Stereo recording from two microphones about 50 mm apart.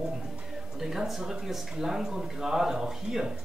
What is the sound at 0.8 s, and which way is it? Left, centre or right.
Speech, centre.